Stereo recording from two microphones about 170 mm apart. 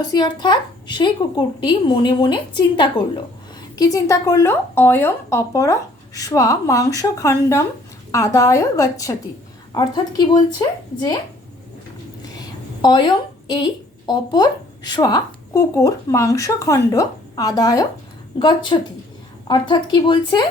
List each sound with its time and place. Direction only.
0.1 s a woman's voice: 25° left (ahead or behind)
12.8 s a woman's voice: 25° left (ahead or behind)